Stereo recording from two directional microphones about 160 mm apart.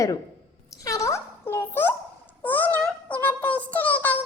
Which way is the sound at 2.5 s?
10° left (ahead or behind).